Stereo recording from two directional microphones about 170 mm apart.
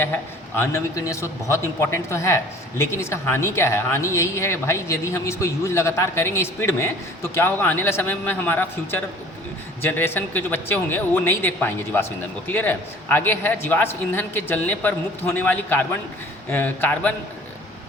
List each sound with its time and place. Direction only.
0.5 s a man's voice: 15° left (ahead or behind)